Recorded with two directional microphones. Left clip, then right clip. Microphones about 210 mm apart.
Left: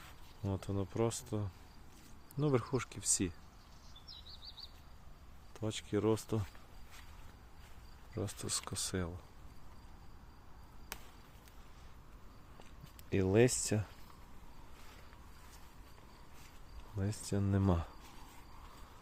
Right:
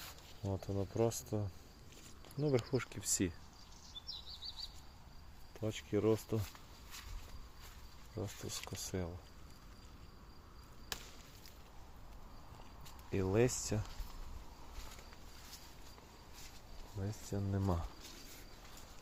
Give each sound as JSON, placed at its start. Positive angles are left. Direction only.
{"t": 0.4, "sound": "speech", "side_deg": 25}
{"t": 2.7, "sound": "speech", "side_deg": 5}
{"t": 5.5, "sound": "speech", "side_deg": 15}
{"t": 8.1, "sound": "speech", "side_deg": 20}
{"t": 8.4, "sound": "speech", "side_deg": 35}
{"t": 8.9, "sound": "speech", "side_deg": 20}
{"t": 13.1, "sound": "speech", "side_deg": 35}
{"t": 17.2, "sound": "speech", "side_deg": 40}